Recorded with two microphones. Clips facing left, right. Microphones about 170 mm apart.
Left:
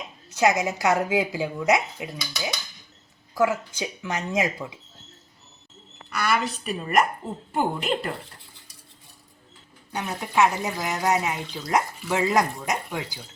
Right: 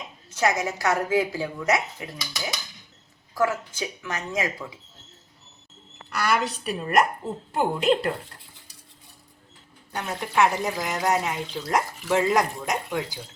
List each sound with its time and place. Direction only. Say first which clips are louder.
0.3 s a woman's voice: left 3 dB; 15° left (ahead or behind)
6.2 s speech: right 1 dB; centre (ahead or behind)
10.2 s speech: even; 5° left (ahead or behind)